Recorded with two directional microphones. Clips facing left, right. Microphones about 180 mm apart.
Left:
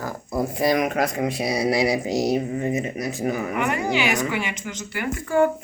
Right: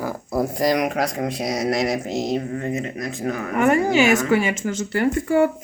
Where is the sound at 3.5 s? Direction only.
45° right (ahead or behind).